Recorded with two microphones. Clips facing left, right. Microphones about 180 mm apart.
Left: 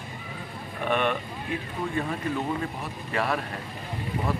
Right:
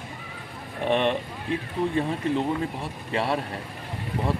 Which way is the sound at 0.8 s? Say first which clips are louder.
Right 3 dB; 30° right (ahead or behind).